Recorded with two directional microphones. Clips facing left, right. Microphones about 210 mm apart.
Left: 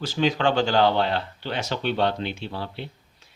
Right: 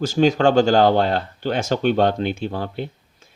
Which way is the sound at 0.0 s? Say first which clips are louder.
Right 6 dB; 45° right (ahead or behind).